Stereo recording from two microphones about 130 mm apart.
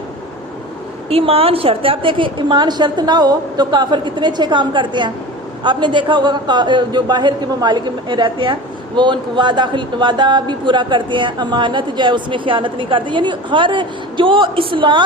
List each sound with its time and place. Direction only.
1.1 s speech: 45° right (ahead or behind)